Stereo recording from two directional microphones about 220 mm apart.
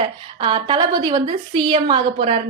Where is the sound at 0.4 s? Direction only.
20° right (ahead or behind).